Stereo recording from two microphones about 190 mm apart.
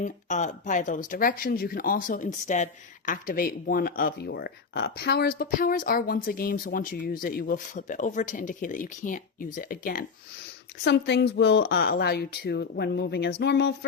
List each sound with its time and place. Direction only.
0.0 s speech: 40° left (ahead or behind)
10.8 s a woman's voice: 60° left (ahead or behind)